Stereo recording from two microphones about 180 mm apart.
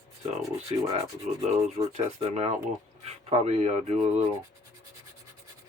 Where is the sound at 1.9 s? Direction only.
40° right (ahead or behind).